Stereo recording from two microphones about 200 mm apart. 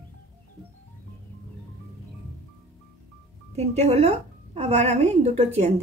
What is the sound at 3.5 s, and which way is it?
A woman's voice, 35° right (ahead or behind).